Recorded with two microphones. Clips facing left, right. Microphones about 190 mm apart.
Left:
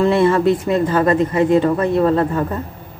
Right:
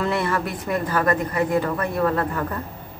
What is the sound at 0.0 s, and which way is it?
A woman's voice, 25° left (ahead or behind).